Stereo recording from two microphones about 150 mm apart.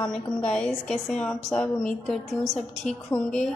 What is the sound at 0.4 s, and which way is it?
A woman's voice, 5° left (ahead or behind).